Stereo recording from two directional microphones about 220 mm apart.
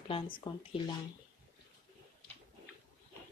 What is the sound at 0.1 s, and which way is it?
Speech, 25° left (ahead or behind).